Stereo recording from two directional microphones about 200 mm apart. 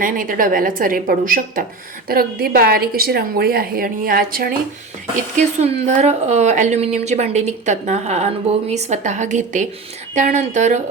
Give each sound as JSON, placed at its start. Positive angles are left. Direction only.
{"t": 0.0, "sound": "a woman's voice", "side_deg": -45}
{"t": 5.4, "sound": "a woman's voice", "side_deg": -35}